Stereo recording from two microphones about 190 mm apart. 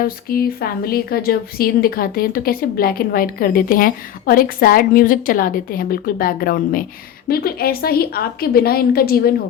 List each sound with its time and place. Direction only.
0.0 s a woman's voice: 50° left (ahead or behind)